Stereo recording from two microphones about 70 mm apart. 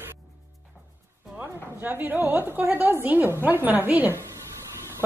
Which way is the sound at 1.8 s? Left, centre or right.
Right.